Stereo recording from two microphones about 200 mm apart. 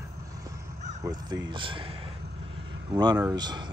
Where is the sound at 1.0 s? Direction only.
20° right (ahead or behind).